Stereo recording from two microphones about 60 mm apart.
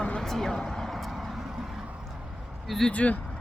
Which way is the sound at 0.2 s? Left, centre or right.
Centre.